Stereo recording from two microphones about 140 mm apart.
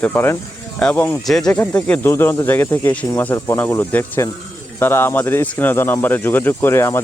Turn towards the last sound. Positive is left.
turn(degrees=20)  # may be behind; listen again after turning